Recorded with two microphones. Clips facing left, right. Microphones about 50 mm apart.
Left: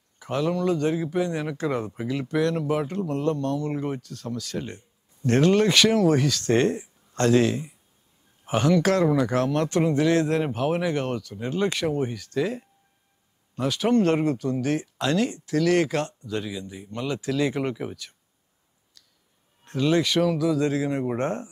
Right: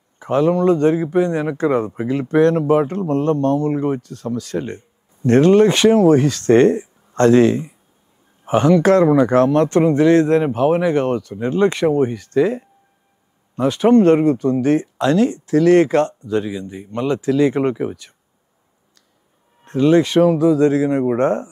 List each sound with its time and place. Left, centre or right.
0.2 s a man's voice: right
19.6 s speech: right